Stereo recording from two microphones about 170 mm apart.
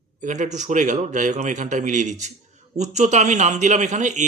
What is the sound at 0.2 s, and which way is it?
A man's voice, 45° right (ahead or behind).